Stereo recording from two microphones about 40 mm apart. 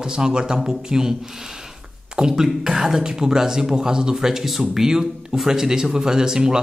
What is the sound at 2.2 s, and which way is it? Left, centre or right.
Speech, centre.